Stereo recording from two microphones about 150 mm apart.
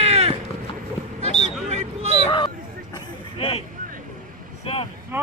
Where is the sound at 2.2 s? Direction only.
35° left (ahead or behind).